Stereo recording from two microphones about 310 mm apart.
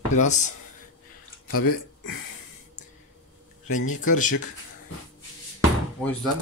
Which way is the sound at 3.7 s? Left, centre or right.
Left.